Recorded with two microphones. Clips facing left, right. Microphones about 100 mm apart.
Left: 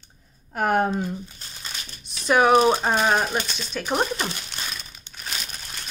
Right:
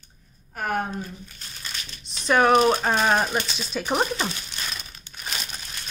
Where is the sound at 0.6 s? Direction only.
65° left (ahead or behind).